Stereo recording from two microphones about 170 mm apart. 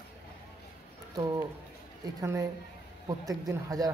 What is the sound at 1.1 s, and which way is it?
Speech, 20° right (ahead or behind).